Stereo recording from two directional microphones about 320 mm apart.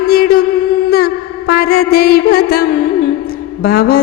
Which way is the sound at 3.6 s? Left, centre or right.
Left.